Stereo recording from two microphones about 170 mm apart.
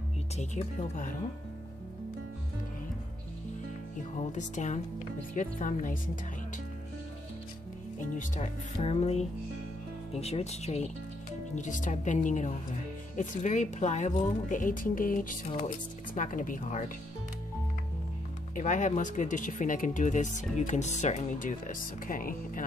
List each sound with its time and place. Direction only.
0.4 s a woman's voice: 45° left (ahead or behind)
4.2 s a woman's voice: 45° left (ahead or behind)
8.0 s a woman's voice: 45° left (ahead or behind)
18.5 s a woman's voice: 50° left (ahead or behind)